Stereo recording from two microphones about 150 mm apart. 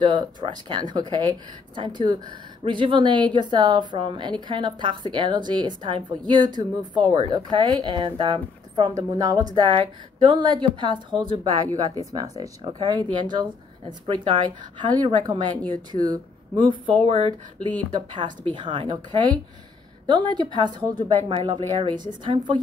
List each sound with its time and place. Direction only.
0.0 s a woman's voice: 30° right (ahead or behind)
20.3 s a woman's voice: 30° right (ahead or behind)